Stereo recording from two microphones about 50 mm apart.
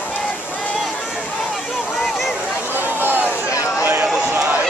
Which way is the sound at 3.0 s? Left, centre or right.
Right.